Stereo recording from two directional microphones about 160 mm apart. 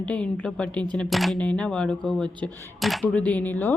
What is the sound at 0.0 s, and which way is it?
Speech, 5° left (ahead or behind).